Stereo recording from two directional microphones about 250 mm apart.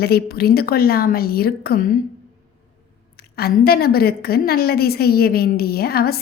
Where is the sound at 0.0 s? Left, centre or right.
Left.